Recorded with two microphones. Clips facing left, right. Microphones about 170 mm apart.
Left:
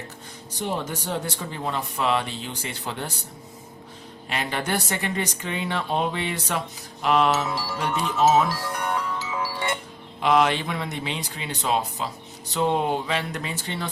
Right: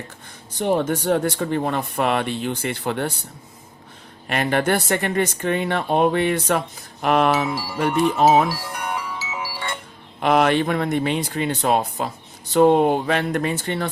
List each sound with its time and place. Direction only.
0.6 s speech: 55° right (ahead or behind)
4.3 s speech: 55° right (ahead or behind)
7.5 s speech: 10° right (ahead or behind)
8.4 s music: 10° right (ahead or behind)
10.2 s speech: 55° right (ahead or behind)